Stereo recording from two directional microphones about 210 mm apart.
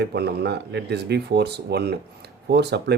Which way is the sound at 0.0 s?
50° right (ahead or behind).